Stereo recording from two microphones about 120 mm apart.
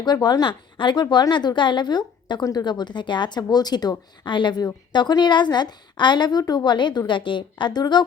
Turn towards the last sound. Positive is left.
turn(degrees=35)  # may be behind; listen again after turning